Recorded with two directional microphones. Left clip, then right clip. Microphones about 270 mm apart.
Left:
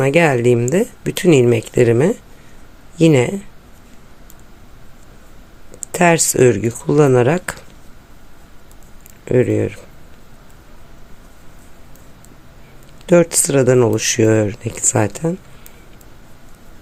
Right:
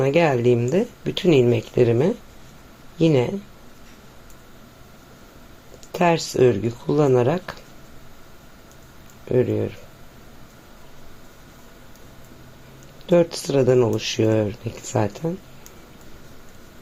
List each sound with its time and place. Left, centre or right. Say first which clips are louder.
0.0 s speech: left 5 dB; left
5.9 s speech: left 6 dB; left
9.3 s speech: left 5 dB; left
13.1 s speech: left 5 dB; left